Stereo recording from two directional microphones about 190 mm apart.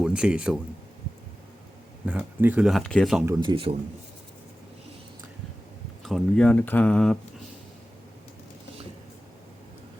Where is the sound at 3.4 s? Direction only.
25° right (ahead or behind).